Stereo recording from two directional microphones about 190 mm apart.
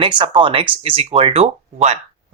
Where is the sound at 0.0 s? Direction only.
25° right (ahead or behind).